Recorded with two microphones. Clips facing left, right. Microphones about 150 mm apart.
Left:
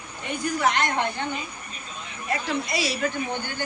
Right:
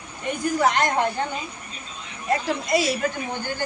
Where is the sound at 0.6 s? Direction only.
40° right (ahead or behind).